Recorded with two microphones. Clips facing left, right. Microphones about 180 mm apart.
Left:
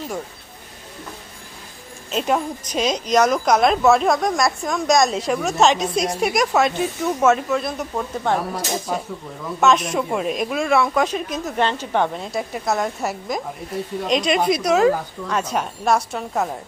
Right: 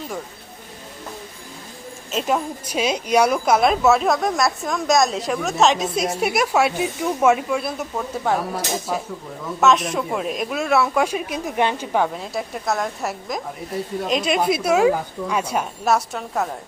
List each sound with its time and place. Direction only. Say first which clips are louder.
2.1 s a woman's voice: left 1 dB; centre (ahead or behind)